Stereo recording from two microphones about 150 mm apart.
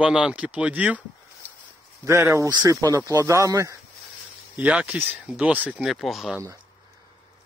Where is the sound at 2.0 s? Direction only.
20° right (ahead or behind).